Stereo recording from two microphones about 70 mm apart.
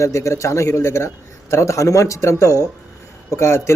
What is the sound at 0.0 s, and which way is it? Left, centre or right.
A man's voice, left.